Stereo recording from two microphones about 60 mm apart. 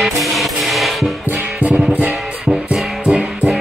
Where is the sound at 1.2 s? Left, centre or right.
Right.